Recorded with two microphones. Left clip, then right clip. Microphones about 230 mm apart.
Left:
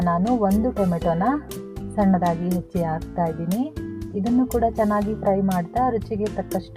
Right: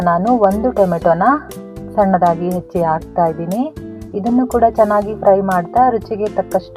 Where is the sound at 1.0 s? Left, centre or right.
Right.